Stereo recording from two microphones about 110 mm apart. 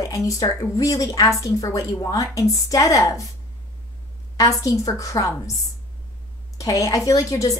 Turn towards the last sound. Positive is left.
turn(degrees=30)  # may be behind; listen again after turning